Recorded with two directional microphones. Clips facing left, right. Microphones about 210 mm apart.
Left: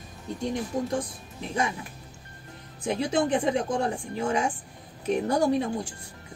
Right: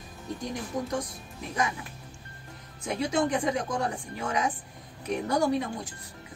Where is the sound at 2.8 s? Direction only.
30° left (ahead or behind).